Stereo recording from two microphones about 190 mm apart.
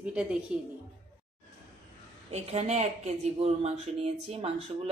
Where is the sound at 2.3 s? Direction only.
35° right (ahead or behind).